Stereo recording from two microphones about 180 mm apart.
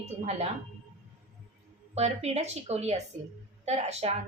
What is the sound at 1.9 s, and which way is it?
A woman's voice, 35° right (ahead or behind).